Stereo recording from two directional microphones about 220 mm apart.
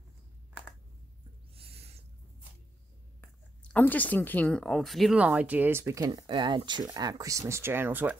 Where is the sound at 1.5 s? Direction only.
25° right (ahead or behind).